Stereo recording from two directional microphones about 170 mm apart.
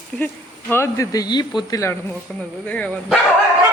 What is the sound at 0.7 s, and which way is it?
Speech, 15° left (ahead or behind).